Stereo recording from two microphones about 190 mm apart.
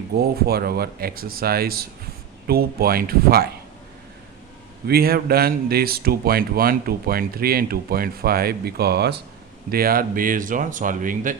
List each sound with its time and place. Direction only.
0.2 s speech: 55° right (ahead or behind)
4.9 s speech: 55° right (ahead or behind)